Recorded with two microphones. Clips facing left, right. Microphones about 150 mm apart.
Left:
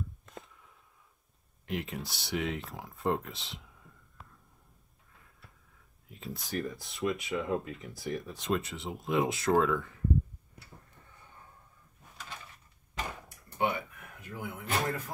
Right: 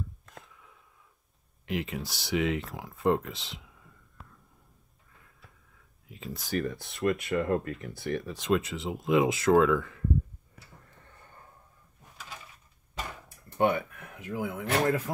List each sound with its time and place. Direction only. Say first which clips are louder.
0.2 s a sound: left 2 dB; centre (ahead or behind)
1.7 s speech: right 3 dB; centre (ahead or behind)
13.6 s drawer open or close: right 6 dB; 55° right (ahead or behind); by 15.0 s 90° right